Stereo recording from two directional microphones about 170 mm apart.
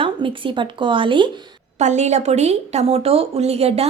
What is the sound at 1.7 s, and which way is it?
Speech, 45° right (ahead or behind).